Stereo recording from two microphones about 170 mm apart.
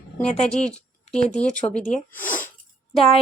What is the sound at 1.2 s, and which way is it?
Speech, 5° left (ahead or behind).